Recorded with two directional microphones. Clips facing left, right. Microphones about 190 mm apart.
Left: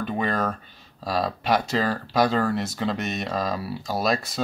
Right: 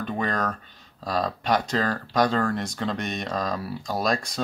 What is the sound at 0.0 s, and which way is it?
Speech, 5° left (ahead or behind).